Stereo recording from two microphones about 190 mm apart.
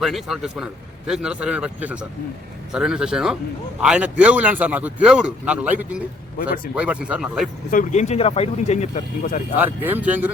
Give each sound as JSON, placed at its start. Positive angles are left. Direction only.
{"t": 0.0, "sound": "a man's voice", "side_deg": 0}
{"t": 7.7, "sound": "speech", "side_deg": 40}
{"t": 9.8, "sound": "speech", "side_deg": -10}